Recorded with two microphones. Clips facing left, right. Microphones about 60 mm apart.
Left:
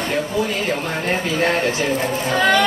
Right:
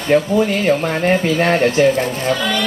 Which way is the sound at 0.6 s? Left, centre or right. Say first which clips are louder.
Right 6 dB; right.